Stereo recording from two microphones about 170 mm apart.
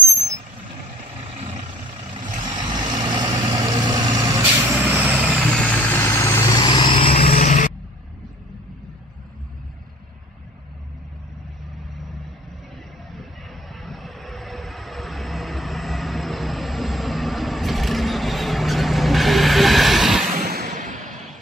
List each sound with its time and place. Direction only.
2.5 s vehicle: 25° right (ahead or behind)
4.4 s vehicle: 10° right (ahead or behind)
5.5 s vehicle: 10° left (ahead or behind); by 7.2 s 35° left (ahead or behind)
7.3 s vehicle: 50° left (ahead or behind)
13.7 s vehicle: centre (ahead or behind)
20.3 s a sound: 65° right (ahead or behind)
20.6 s a sound: 45° right (ahead or behind)